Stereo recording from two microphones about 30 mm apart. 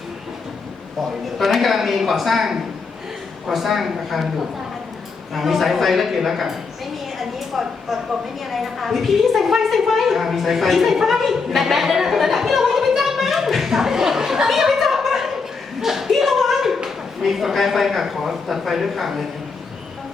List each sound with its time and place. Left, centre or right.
1.2 s a man's voice: centre
3.5 s a man's voice: centre
5.3 s a man's voice: centre
7.2 s a sound: centre
8.4 s a woman's voice: centre
13.5 s a sound: centre
15.8 s clapping: centre
17.2 s a man's voice: centre